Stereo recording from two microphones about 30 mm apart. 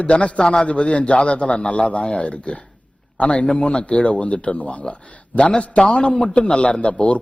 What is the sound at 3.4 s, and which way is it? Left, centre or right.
A man's voice, left.